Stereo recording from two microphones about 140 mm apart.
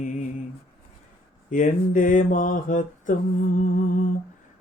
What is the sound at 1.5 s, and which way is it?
Mantra, 65° left (ahead or behind).